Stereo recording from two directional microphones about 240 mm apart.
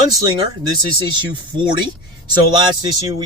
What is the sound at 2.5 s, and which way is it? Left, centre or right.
Speech, centre.